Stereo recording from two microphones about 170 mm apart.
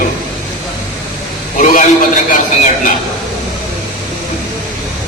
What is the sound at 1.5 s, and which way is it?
Speech, 50° left (ahead or behind).